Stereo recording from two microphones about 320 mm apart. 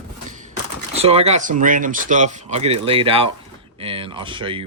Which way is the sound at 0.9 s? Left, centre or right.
Centre.